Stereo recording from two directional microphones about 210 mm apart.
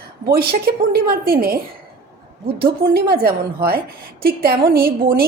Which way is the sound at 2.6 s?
45° right (ahead or behind).